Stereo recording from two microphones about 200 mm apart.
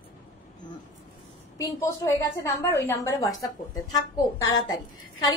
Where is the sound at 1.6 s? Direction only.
15° left (ahead or behind).